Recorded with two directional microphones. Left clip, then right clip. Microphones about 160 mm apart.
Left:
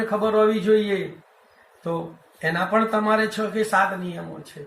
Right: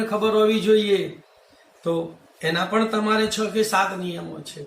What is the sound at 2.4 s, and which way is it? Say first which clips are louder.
Speech: left 1 dB; 15° right (ahead or behind).